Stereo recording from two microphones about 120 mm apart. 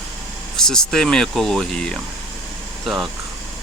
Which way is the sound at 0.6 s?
5° left (ahead or behind).